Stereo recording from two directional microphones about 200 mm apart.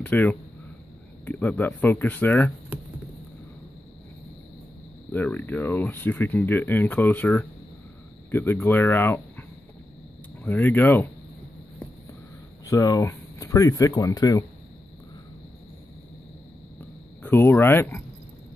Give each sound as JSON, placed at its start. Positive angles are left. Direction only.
{"t": 0.0, "sound": "speech", "side_deg": 10}
{"t": 5.1, "sound": "speech", "side_deg": 10}
{"t": 10.4, "sound": "speech", "side_deg": 10}
{"t": 12.6, "sound": "speech", "side_deg": 15}
{"t": 17.2, "sound": "speech", "side_deg": 10}